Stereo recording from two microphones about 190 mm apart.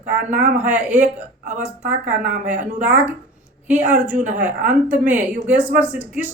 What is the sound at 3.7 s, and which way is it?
Speech, 10° right (ahead or behind).